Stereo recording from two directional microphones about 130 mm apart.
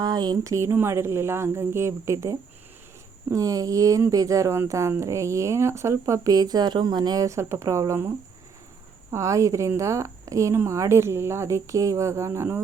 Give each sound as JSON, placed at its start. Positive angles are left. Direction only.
{"t": 0.0, "sound": "speech", "side_deg": -30}